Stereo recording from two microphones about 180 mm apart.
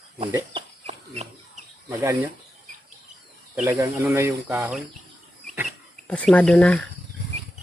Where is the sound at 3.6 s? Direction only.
10° right (ahead or behind).